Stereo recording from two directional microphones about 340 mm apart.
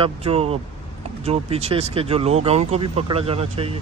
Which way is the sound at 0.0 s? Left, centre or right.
Centre.